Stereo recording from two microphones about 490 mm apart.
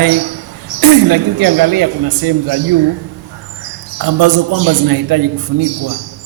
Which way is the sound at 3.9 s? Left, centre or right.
Right.